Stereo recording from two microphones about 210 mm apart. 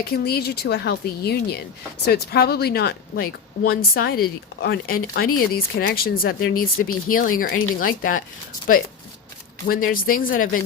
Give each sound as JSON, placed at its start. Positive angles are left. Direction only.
{"t": 0.0, "sound": "speech", "side_deg": 50}
{"t": 9.6, "sound": "speech", "side_deg": 45}